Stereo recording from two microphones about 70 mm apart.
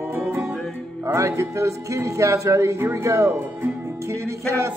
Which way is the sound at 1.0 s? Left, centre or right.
Right.